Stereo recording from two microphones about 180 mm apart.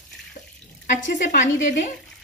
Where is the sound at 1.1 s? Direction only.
45° left (ahead or behind).